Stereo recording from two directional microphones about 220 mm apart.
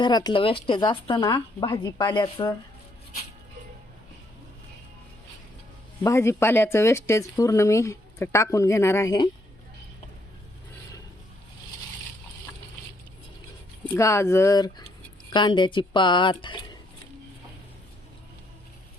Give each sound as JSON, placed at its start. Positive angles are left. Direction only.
{"t": 0.0, "sound": "speech", "side_deg": 20}
{"t": 6.0, "sound": "speech", "side_deg": 10}
{"t": 13.8, "sound": "speech", "side_deg": 10}